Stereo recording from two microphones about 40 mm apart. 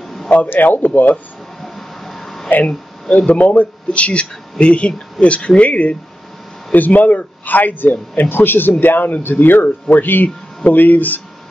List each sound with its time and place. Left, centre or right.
0.0 s a sound: centre
0.5 s speech: left
1.6 s a sound: centre
3.1 s speech: left
3.3 s speech: left
8.2 s speech: left